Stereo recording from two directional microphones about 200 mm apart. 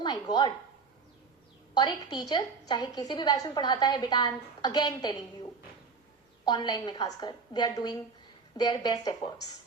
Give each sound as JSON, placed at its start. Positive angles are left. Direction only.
{"t": 0.0, "sound": "speech", "side_deg": 20}
{"t": 1.7, "sound": "a woman's voice", "side_deg": 20}
{"t": 6.4, "sound": "a woman's voice", "side_deg": 20}